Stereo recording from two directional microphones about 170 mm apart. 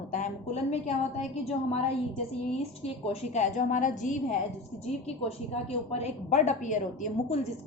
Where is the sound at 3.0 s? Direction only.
40° left (ahead or behind).